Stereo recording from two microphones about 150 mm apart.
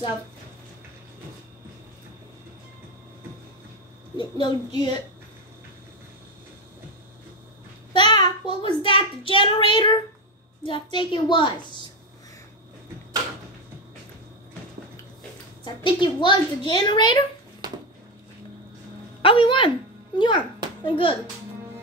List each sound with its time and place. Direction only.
4.2 s a child's voice: 30° left (ahead or behind)
7.9 s a child's voice: 30° left (ahead or behind)
15.6 s a woman's voice: 30° left (ahead or behind)
19.2 s a woman's voice: 35° left (ahead or behind)